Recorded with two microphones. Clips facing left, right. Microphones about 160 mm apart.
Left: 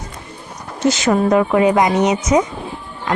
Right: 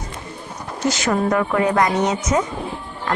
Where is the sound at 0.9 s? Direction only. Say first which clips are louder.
Left 5 dB; 20° left (ahead or behind).